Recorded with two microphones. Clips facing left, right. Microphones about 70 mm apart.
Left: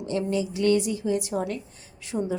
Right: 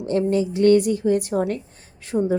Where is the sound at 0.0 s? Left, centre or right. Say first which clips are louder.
Right 6 dB; right.